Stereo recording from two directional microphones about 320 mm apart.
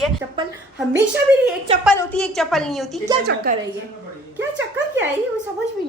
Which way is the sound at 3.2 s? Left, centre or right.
Right.